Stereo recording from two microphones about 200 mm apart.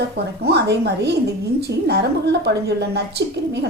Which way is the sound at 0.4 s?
55° right (ahead or behind).